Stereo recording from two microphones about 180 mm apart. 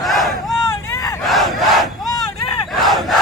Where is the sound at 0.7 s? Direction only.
15° left (ahead or behind).